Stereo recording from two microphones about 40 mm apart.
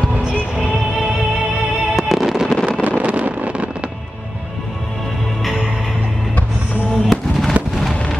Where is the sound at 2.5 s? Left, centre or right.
Centre.